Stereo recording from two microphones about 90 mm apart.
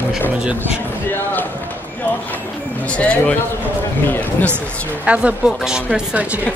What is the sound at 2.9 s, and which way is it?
Speech, 15° left (ahead or behind).